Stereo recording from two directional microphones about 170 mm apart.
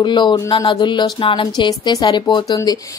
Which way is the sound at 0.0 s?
25° left (ahead or behind).